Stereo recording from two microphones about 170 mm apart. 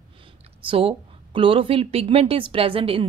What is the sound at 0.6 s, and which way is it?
A woman's voice, 35° right (ahead or behind).